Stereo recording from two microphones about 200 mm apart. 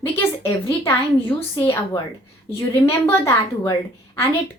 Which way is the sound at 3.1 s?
15° left (ahead or behind).